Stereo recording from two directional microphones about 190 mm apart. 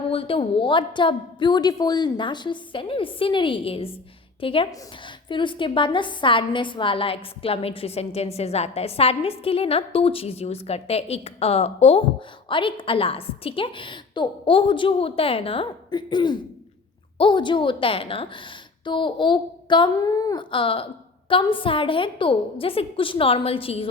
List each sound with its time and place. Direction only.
0.1 s a woman's voice: 30° left (ahead or behind)